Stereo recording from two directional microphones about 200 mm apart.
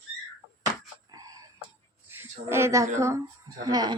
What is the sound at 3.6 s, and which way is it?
Speech, 20° right (ahead or behind).